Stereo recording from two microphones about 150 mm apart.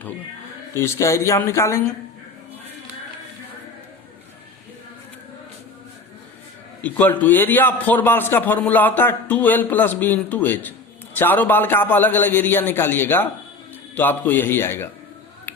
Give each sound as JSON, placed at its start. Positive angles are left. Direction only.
{"t": 0.7, "sound": "speech", "side_deg": 20}
{"t": 6.8, "sound": "a man's voice", "side_deg": 10}